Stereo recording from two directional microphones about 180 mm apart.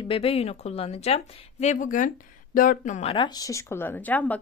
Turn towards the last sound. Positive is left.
turn(degrees=10)  # may be behind; listen again after turning